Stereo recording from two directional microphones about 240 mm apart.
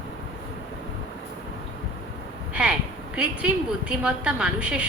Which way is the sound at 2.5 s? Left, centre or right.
Centre.